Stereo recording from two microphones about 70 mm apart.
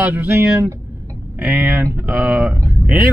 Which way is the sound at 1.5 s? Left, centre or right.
Right.